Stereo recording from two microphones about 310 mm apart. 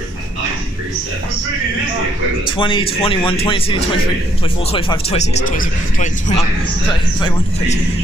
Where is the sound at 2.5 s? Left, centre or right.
Centre.